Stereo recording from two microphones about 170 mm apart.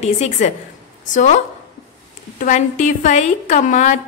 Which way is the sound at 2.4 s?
45° left (ahead or behind).